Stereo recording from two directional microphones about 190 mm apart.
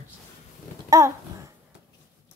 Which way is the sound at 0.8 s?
15° right (ahead or behind).